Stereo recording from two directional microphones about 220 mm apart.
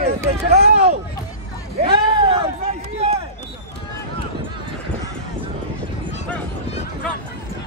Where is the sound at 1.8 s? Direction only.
25° right (ahead or behind).